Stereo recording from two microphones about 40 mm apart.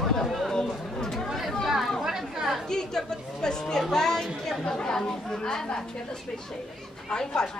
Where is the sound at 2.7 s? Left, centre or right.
Centre.